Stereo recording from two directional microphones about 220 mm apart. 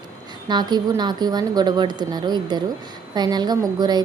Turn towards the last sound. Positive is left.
turn(degrees=-20)  # may be behind; listen again after turning